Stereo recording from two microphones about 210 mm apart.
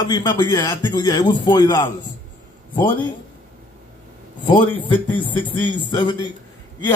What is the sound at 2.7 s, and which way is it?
Speech, 10° left (ahead or behind).